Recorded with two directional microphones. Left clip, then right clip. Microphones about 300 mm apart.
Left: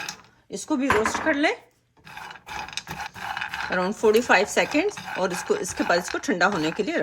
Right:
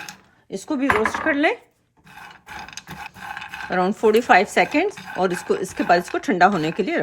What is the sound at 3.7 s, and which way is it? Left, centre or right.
Speech, right.